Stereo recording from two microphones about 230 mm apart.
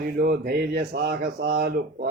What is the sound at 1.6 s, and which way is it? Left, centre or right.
Speech, right.